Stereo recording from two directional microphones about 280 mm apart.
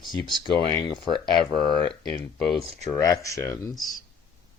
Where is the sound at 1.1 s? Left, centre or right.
Centre.